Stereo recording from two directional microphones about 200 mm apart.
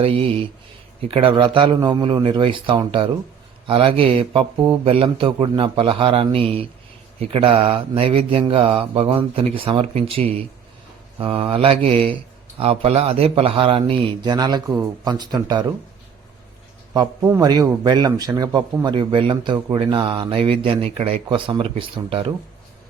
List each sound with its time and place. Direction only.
0.0 s a man's voice: 30° right (ahead or behind)
16.9 s a man's voice: 15° right (ahead or behind)